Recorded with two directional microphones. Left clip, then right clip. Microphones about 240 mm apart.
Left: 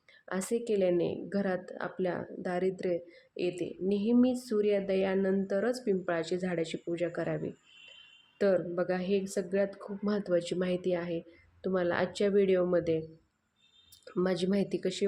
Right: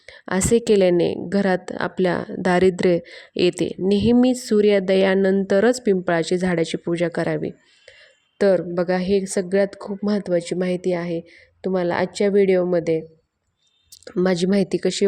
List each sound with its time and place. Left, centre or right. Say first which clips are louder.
0.0 s a woman's voice: right 13 dB; right